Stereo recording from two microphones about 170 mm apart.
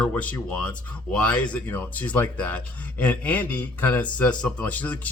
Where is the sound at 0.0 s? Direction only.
10° left (ahead or behind).